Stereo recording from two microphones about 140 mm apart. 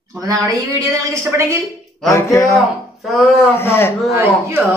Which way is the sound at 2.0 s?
20° left (ahead or behind).